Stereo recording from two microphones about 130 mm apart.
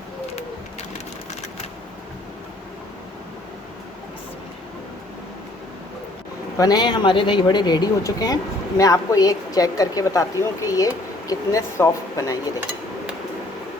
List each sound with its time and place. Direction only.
6.6 s a woman's voice: 30° left (ahead or behind)